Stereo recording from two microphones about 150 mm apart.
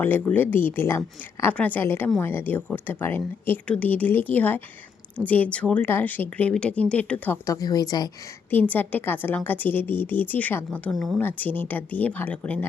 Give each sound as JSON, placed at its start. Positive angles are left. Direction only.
{"t": 0.0, "sound": "speech", "side_deg": 10}
{"t": 7.4, "sound": "speech", "side_deg": 25}
{"t": 8.4, "sound": "speech", "side_deg": 10}